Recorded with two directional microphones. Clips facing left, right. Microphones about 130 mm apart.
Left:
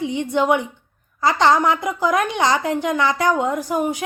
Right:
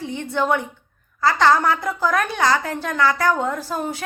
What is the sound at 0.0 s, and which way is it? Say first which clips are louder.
A woman's voice: left 4 dB; 15° left (ahead or behind).